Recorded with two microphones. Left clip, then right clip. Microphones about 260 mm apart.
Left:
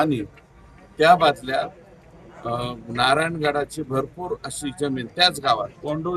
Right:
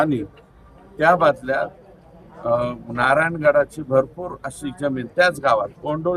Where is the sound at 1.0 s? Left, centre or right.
Centre.